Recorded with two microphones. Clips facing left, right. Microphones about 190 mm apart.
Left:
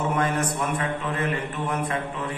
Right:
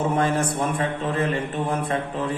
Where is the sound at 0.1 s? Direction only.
30° right (ahead or behind).